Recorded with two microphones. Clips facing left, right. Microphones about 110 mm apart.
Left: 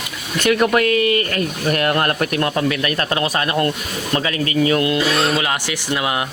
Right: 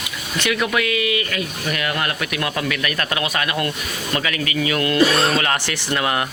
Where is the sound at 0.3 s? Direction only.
45° left (ahead or behind).